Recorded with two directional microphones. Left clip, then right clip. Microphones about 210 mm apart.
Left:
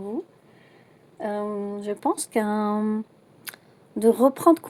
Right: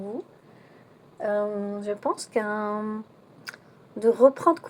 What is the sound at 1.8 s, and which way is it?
A woman's voice, 50° left (ahead or behind).